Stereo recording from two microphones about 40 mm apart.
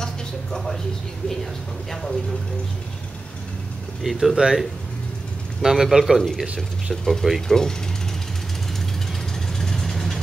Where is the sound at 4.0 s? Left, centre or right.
Centre.